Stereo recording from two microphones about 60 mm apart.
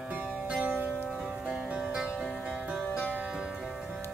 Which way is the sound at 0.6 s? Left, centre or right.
Right.